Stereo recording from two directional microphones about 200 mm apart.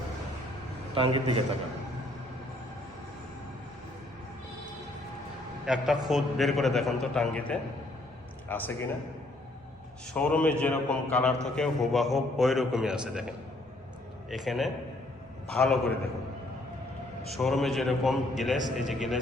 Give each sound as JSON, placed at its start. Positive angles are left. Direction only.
{"t": 0.9, "sound": "a man's voice", "side_deg": -25}
{"t": 5.6, "sound": "a man's voice", "side_deg": -5}
{"t": 10.2, "sound": "a man's voice", "side_deg": 5}
{"t": 17.3, "sound": "a man's voice", "side_deg": 0}